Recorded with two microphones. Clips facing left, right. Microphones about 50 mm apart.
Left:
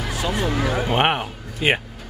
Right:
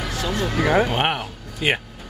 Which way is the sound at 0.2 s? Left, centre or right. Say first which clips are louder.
Even; centre.